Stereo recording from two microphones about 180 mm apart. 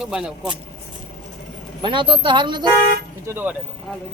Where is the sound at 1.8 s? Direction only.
25° right (ahead or behind).